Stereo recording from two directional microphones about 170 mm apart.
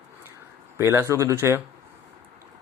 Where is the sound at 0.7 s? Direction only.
15° right (ahead or behind).